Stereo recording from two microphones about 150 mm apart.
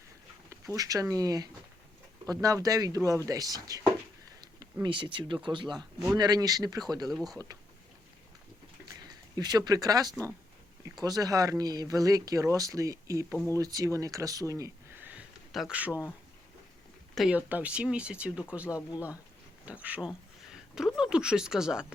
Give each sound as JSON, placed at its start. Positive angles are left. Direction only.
{"t": 0.5, "sound": "speech", "side_deg": -20}
{"t": 7.1, "sound": "speech", "side_deg": 0}
{"t": 8.9, "sound": "speech", "side_deg": -25}
{"t": 15.1, "sound": "a sound", "side_deg": -5}
{"t": 17.2, "sound": "speech", "side_deg": -10}